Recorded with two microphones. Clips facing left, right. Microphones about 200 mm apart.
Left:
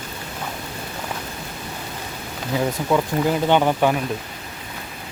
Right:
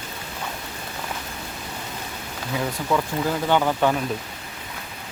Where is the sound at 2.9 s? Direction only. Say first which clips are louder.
Left 3 dB; 20° left (ahead or behind).